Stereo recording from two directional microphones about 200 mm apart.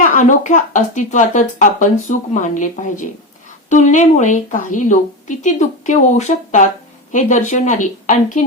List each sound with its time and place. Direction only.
0.0 s speech: 40° left (ahead or behind)